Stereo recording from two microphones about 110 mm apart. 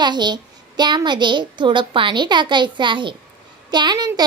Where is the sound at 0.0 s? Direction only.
40° right (ahead or behind).